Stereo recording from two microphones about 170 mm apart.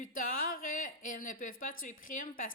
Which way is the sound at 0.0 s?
55° left (ahead or behind).